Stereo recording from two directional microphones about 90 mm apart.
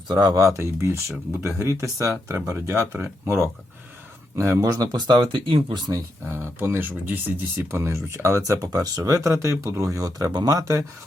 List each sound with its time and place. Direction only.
0.1 s speech: 50° right (ahead or behind); by 5.8 s 65° right (ahead or behind)
5.9 s speech: 25° right (ahead or behind)